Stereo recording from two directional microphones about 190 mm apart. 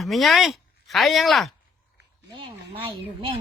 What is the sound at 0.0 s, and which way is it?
Speech, centre (ahead or behind).